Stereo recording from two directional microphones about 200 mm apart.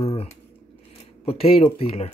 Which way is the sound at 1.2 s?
30° left (ahead or behind).